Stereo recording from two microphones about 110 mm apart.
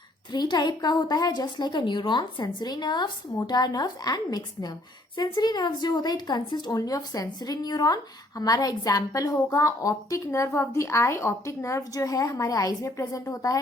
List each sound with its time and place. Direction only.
0.3 s a woman's voice: 40° left (ahead or behind)